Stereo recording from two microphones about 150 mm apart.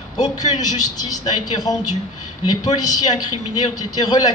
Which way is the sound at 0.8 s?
25° left (ahead or behind).